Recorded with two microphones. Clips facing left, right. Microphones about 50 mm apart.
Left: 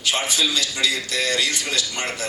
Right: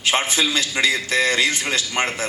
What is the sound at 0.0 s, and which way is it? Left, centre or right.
A man's voice, right.